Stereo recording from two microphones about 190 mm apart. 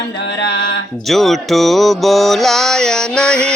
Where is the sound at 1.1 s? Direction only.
Centre (ahead or behind).